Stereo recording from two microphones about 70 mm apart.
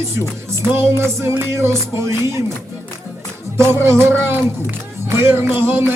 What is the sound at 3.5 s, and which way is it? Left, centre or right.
Music, right.